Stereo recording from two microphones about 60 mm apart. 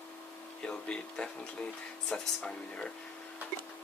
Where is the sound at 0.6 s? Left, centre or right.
Centre.